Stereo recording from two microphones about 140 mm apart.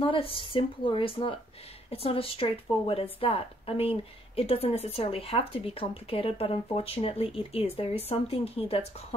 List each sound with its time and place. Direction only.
0.0 s a woman's voice: 40° left (ahead or behind)